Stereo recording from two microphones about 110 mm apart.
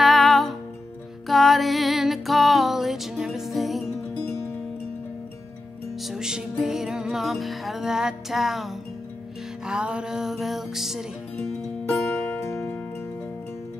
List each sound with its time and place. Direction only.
0.0 s music: centre (ahead or behind)
6.0 s music: 5° right (ahead or behind)
11.9 s music: 20° left (ahead or behind)